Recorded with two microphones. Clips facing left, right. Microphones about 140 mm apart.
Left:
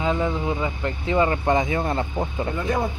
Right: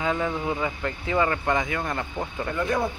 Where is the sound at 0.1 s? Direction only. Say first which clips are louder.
Left 2 dB; 15° left (ahead or behind).